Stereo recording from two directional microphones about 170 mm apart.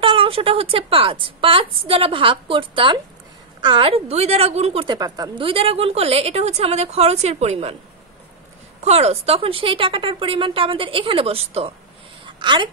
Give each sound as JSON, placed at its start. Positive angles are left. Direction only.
{"t": 0.0, "sound": "a woman's voice", "side_deg": -30}
{"t": 8.8, "sound": "a woman's voice", "side_deg": -40}